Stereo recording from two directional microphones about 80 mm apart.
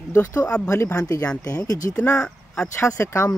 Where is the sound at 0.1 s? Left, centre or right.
Left.